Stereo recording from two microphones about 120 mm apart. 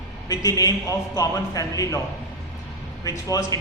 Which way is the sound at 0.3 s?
30° left (ahead or behind).